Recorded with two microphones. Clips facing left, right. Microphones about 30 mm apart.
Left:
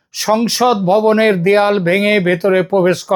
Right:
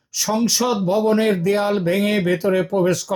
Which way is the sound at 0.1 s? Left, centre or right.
Left.